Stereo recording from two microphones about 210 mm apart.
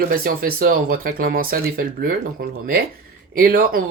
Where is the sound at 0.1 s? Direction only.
45° right (ahead or behind).